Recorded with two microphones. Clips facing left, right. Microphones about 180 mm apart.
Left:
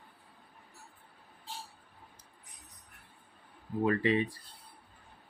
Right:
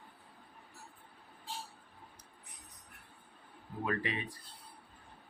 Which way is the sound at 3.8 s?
30° left (ahead or behind).